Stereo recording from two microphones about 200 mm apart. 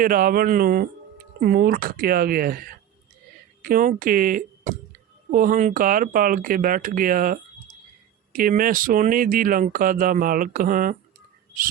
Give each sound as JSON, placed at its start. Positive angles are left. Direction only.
{"t": 0.0, "sound": "speech", "side_deg": -45}
{"t": 3.6, "sound": "speech", "side_deg": -45}